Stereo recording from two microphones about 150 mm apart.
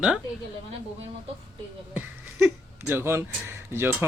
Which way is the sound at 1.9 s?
15° right (ahead or behind).